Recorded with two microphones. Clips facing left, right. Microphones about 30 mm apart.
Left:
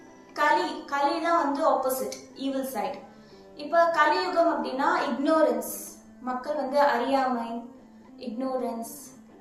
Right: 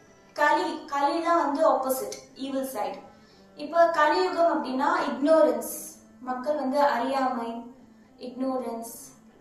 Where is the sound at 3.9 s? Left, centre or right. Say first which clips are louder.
Even; centre.